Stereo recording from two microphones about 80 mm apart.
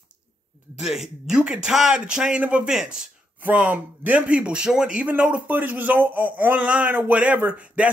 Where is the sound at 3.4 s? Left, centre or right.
Right.